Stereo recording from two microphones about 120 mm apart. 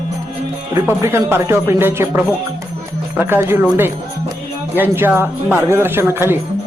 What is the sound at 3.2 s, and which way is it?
A woman's voice, 15° right (ahead or behind).